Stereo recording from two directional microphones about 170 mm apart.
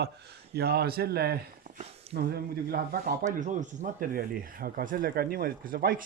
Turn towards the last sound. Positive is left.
turn(degrees=-55)  # may be behind; listen again after turning